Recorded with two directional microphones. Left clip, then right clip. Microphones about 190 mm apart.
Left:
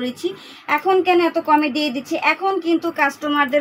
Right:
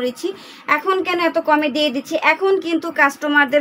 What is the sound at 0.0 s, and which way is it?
A woman's voice, 35° right (ahead or behind).